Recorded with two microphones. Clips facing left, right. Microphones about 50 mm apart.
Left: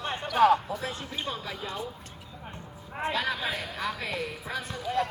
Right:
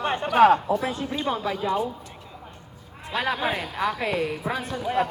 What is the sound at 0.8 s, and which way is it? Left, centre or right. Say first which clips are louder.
Speech: right 7 dB; right.